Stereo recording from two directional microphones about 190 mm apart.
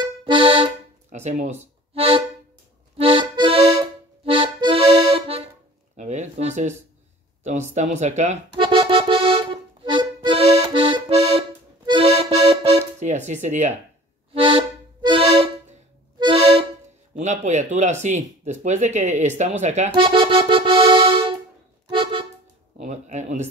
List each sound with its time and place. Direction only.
0.0 s accordion: 25° right (ahead or behind)
1.1 s speech: 35° right (ahead or behind)
2.0 s accordion: 30° right (ahead or behind)
5.9 s a sound: 40° right (ahead or behind)
7.4 s speech: 40° right (ahead or behind)
8.5 s accordion: 25° right (ahead or behind)
14.3 s accordion: 25° right (ahead or behind)
17.2 s speech: 40° right (ahead or behind)
19.9 s speech: 25° right (ahead or behind)
21.9 s music: 25° right (ahead or behind)
22.8 s speech: 35° right (ahead or behind)